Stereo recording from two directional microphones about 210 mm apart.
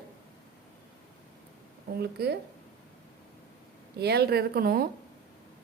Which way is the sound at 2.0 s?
50° right (ahead or behind).